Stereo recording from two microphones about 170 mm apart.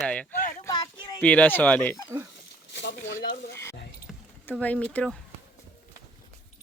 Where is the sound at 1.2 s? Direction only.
10° left (ahead or behind).